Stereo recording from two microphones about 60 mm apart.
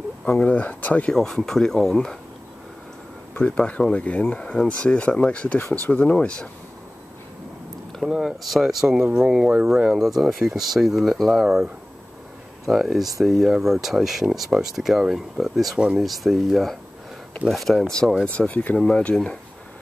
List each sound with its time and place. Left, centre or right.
0.2 s speech: left
1.1 s speech: centre
3.4 s speech: centre
8.0 s speech: centre
9.1 s speech: centre
9.9 s speech: centre
11.4 s speech: centre
18.5 s speech: left
18.8 s speech: centre